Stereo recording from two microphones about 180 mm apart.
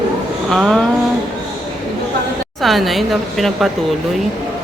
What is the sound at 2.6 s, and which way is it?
Speech, centre (ahead or behind).